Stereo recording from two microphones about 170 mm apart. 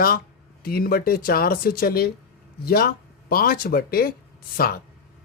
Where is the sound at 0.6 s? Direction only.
60° left (ahead or behind).